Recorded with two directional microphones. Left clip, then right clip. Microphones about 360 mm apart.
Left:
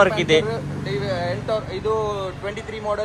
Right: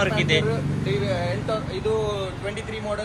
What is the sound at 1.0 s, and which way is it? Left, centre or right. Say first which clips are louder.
Vehicle: left 2 dB; left.